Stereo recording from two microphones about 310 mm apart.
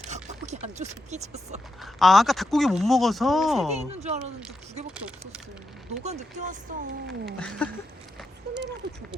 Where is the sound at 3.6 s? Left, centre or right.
Right.